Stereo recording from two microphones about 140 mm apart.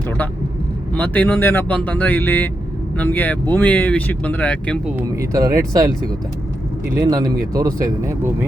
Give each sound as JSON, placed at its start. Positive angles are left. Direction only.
{"t": 0.9, "sound": "speech", "side_deg": 10}
{"t": 4.9, "sound": "speech", "side_deg": -25}
{"t": 6.9, "sound": "speech", "side_deg": -25}